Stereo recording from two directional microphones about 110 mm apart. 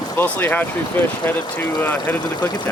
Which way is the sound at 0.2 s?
20° left (ahead or behind).